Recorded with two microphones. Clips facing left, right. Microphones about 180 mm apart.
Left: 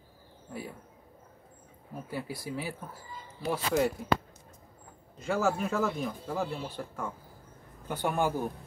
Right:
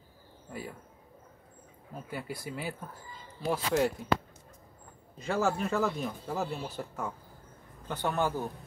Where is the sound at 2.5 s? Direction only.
5° left (ahead or behind).